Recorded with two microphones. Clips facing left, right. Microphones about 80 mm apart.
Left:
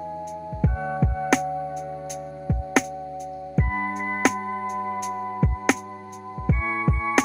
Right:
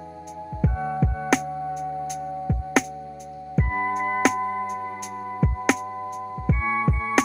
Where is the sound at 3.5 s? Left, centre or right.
Centre.